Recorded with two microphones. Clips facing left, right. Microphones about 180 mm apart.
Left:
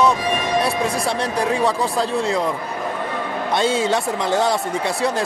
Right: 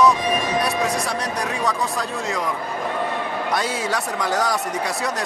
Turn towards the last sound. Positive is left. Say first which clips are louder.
# left 3 dB
turn(degrees=25)  # may be behind; listen again after turning